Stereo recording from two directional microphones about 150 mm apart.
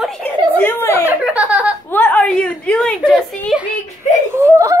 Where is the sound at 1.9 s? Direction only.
10° left (ahead or behind).